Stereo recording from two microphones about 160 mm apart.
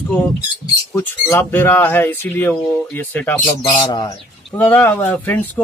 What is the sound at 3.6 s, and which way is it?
Speech, 30° left (ahead or behind).